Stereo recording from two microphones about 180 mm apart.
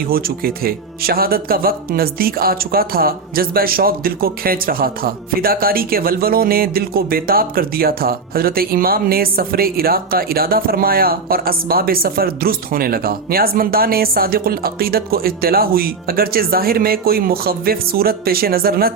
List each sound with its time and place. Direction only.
0.1 s speech: 55° right (ahead or behind)